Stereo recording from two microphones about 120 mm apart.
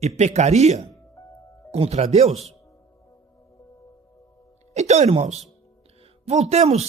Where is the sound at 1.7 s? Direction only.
60° right (ahead or behind).